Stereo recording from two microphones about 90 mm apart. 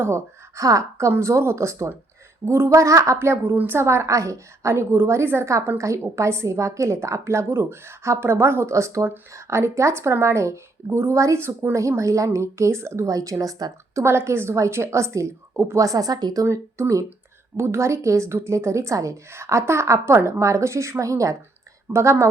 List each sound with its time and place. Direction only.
0.0 s a woman's voice: 35° right (ahead or behind)
14.0 s a woman's voice: 30° right (ahead or behind)